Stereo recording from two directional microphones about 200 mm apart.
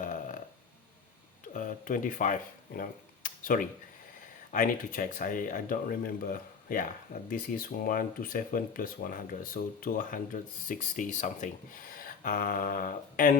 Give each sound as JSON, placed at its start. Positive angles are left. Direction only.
{"t": 0.0, "sound": "burping", "side_deg": 40}
{"t": 1.5, "sound": "speech", "side_deg": 40}